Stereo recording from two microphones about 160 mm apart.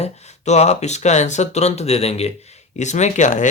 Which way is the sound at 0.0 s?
45° left (ahead or behind).